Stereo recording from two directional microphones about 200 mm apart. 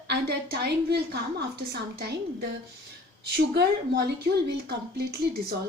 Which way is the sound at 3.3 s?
55° right (ahead or behind).